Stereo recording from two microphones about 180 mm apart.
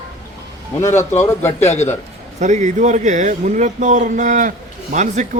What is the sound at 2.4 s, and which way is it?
Speech, 40° right (ahead or behind).